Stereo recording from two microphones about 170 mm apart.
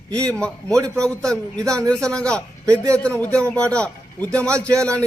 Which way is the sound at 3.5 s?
5° left (ahead or behind).